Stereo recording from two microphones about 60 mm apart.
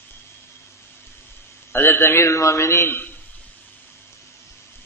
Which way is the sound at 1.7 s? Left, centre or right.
Left.